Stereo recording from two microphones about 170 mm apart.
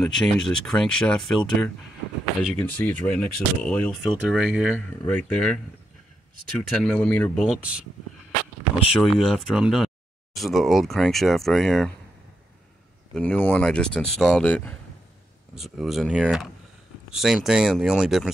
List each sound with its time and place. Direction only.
0.0 s speech: 5° left (ahead or behind)
4.7 s speech: 10° left (ahead or behind)
6.7 s speech: 5° left (ahead or behind)
7.3 s speech: centre (ahead or behind)
8.9 s speech: centre (ahead or behind)
13.1 s speech: 10° left (ahead or behind)